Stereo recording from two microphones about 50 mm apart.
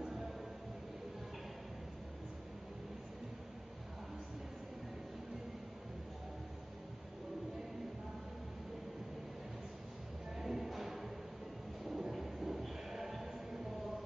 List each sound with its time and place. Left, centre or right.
10.3 s music: centre
11.8 s vehicle: centre
12.6 s a sound: centre